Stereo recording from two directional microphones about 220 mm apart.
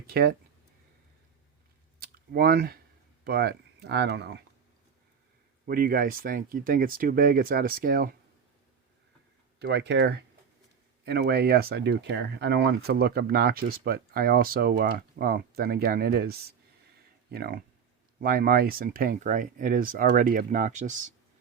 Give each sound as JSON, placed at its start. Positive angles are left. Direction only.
{"t": 0.1, "sound": "speech", "side_deg": -45}
{"t": 2.0, "sound": "a sound", "side_deg": -45}
{"t": 3.2, "sound": "speech", "side_deg": -45}
{"t": 5.6, "sound": "speech", "side_deg": -40}
{"t": 9.6, "sound": "speech", "side_deg": -50}